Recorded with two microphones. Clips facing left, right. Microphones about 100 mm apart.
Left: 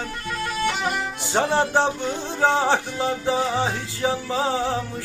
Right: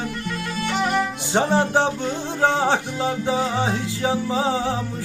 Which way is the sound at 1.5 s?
15° right (ahead or behind).